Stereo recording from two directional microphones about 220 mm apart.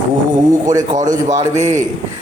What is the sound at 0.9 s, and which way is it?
Speech, 35° right (ahead or behind).